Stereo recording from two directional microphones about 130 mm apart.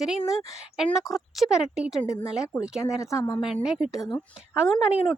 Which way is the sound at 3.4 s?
5° right (ahead or behind).